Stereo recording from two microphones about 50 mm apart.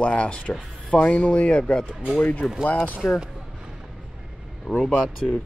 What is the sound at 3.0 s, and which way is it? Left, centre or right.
Speech, centre.